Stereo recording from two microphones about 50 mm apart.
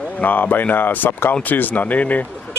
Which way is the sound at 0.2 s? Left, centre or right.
Left.